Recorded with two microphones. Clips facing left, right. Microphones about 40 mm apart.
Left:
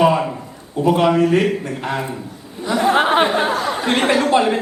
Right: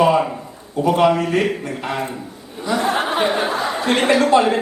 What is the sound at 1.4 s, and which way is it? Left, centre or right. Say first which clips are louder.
Speech: left 2 dB; centre.